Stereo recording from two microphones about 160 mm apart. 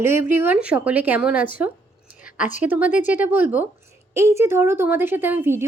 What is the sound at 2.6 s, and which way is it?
Speech, 10° right (ahead or behind).